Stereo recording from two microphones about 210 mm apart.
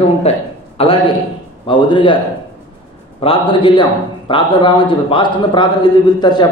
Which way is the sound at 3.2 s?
25° left (ahead or behind).